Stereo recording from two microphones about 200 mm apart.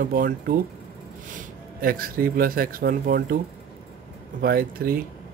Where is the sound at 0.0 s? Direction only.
45° right (ahead or behind).